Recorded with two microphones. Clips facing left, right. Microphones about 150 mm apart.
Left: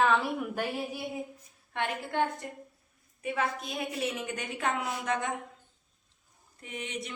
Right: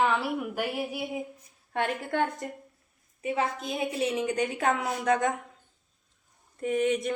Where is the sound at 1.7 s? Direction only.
45° right (ahead or behind).